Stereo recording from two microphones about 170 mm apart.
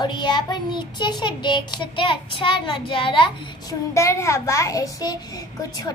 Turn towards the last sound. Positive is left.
turn(degrees=20)  # may be behind; listen again after turning